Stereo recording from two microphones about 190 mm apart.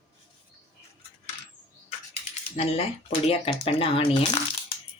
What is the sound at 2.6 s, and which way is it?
Speech, 35° left (ahead or behind).